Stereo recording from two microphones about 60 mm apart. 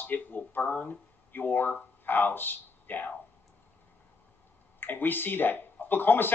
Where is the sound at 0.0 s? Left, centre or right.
Left.